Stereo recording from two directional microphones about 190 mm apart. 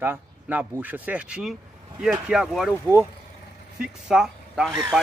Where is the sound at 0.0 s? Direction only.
10° right (ahead or behind).